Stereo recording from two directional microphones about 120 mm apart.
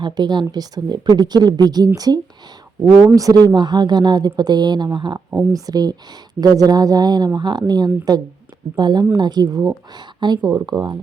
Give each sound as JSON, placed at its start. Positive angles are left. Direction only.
{"t": 0.0, "sound": "speech", "side_deg": -35}